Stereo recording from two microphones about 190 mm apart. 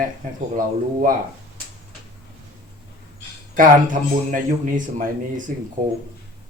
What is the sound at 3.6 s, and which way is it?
A man's voice, 45° right (ahead or behind).